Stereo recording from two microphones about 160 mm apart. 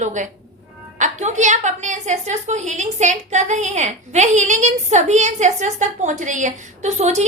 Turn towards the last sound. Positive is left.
turn(degrees=-45)  # may be behind; listen again after turning